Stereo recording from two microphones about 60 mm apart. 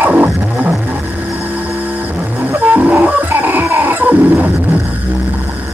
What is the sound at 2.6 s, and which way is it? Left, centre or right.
Music, right.